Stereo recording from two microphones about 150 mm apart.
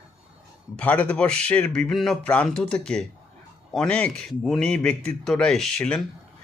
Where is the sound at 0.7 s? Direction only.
10° left (ahead or behind).